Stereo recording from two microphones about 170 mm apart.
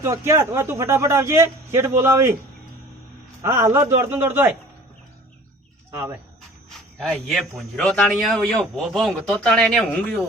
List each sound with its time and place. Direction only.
0.0 s a man's voice: 15° right (ahead or behind)
3.4 s a man's voice: 15° right (ahead or behind)
5.9 s a man's voice: 15° right (ahead or behind)
6.7 s a man's voice: centre (ahead or behind)